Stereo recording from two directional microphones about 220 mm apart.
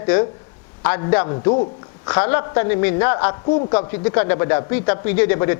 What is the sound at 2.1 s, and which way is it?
Speech, 10° left (ahead or behind).